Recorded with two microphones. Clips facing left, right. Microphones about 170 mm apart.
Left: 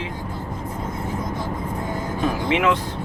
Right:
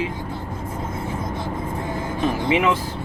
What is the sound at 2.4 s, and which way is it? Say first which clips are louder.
Speech: even; 5° right (ahead or behind).